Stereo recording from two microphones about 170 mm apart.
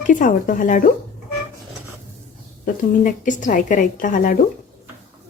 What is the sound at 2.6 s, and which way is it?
A woman's voice, 50° left (ahead or behind).